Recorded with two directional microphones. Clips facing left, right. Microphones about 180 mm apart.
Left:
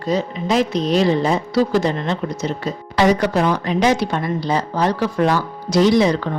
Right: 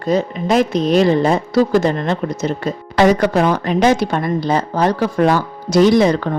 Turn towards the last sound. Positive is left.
turn(degrees=-50)  # may be behind; listen again after turning